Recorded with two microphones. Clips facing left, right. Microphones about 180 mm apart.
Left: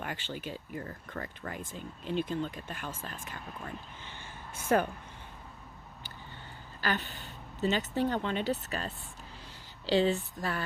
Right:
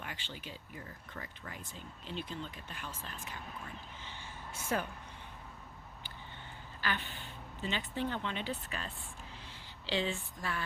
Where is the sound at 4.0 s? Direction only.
55° left (ahead or behind).